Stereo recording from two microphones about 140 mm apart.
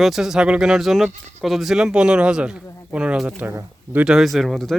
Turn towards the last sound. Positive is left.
turn(degrees=0)  # may be behind; listen again after turning